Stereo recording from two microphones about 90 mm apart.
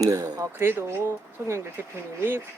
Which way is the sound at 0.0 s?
35° right (ahead or behind).